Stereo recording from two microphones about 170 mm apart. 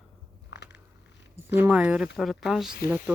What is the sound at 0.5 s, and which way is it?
Biting, 90° left.